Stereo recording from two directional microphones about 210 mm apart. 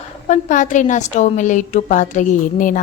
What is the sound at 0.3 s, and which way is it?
A woman's voice, 35° left (ahead or behind).